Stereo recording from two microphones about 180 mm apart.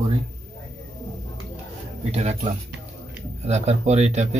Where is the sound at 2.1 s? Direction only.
35° right (ahead or behind).